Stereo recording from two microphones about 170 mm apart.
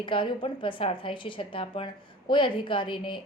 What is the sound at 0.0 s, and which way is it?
A woman's voice, 30° left (ahead or behind).